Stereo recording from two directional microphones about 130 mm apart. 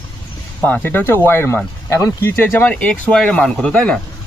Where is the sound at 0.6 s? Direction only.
15° left (ahead or behind).